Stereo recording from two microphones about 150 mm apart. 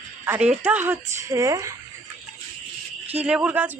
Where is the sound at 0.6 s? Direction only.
10° right (ahead or behind).